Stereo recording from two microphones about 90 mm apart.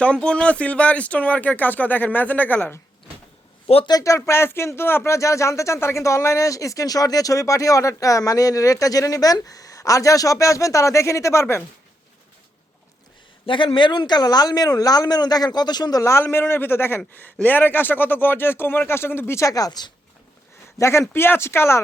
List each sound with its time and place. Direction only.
0.0 s speech: 10° left (ahead or behind)
3.8 s speech: 40° left (ahead or behind)
13.4 s speech: 75° left (ahead or behind); by 16.2 s 35° left (ahead or behind)
16.2 s speech: 25° left (ahead or behind)
19.5 s speech: 40° left (ahead or behind)
20.7 s speech: 30° left (ahead or behind)